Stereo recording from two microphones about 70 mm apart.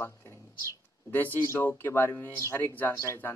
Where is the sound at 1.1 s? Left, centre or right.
Left.